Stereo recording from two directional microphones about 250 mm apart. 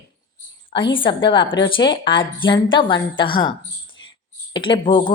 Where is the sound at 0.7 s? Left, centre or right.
Centre.